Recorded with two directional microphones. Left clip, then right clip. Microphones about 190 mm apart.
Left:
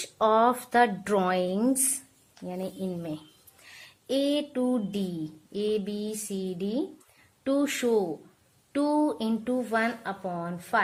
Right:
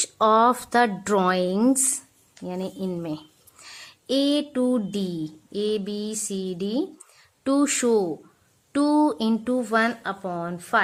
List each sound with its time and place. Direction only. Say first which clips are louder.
0.0 s speech: right 4 dB; 25° right (ahead or behind)